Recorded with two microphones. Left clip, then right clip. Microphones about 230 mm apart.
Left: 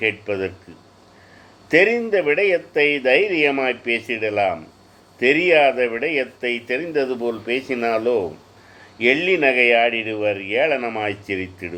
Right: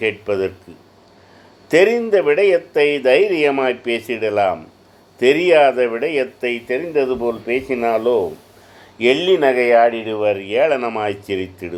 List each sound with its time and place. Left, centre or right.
0.0 s speech: centre
1.7 s speech: centre
9.4 s speech: centre
10.0 s speech: centre